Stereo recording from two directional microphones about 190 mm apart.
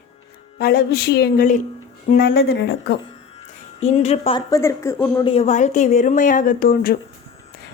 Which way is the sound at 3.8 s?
35° left (ahead or behind).